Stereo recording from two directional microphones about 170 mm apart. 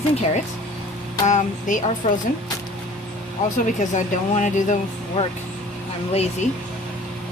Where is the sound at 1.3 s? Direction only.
45° left (ahead or behind).